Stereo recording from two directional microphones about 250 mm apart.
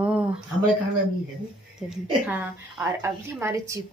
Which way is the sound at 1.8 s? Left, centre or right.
Centre.